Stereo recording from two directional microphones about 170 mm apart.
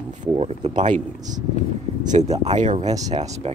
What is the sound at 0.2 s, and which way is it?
Speech, 35° right (ahead or behind).